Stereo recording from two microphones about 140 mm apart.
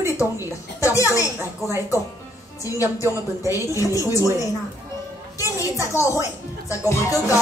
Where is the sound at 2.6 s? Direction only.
25° left (ahead or behind).